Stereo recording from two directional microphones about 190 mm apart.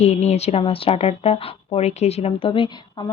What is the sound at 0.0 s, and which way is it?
A woman's voice, 35° left (ahead or behind).